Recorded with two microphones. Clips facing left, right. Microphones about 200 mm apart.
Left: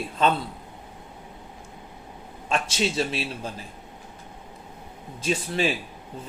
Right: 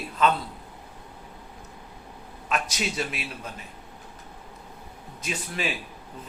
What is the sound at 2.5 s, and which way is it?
Speech, 30° left (ahead or behind).